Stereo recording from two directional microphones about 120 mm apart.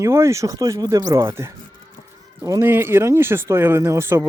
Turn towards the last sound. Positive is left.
turn(degrees=-20)  # may be behind; listen again after turning